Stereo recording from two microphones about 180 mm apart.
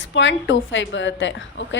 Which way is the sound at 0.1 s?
90° left.